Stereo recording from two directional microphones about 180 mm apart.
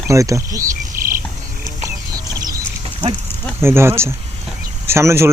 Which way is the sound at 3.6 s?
15° right (ahead or behind).